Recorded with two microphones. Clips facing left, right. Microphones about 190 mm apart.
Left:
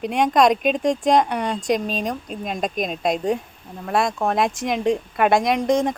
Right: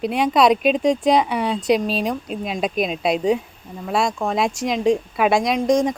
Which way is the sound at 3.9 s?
55° left (ahead or behind).